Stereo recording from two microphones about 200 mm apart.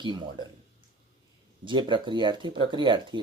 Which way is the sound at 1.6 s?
25° right (ahead or behind).